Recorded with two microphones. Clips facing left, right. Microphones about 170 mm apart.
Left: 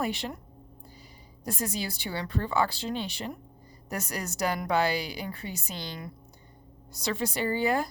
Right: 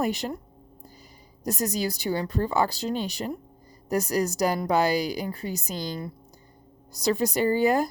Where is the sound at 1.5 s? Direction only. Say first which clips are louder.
Right 5 dB; 40° right (ahead or behind).